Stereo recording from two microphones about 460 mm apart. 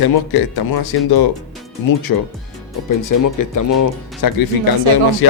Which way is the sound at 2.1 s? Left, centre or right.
Left.